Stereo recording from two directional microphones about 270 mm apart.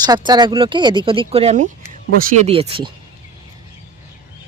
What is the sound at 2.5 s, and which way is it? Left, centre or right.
Speech, right.